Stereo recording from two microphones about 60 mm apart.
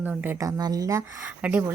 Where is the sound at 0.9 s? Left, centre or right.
Right.